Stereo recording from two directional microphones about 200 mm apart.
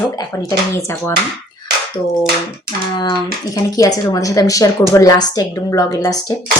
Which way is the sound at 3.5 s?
15° left (ahead or behind).